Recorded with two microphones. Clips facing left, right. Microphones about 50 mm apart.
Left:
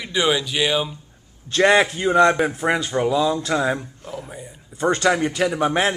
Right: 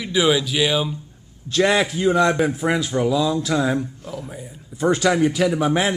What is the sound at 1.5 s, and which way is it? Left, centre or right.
Speech, centre.